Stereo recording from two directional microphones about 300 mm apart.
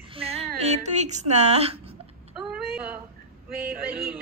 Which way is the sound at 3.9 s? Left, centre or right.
Right.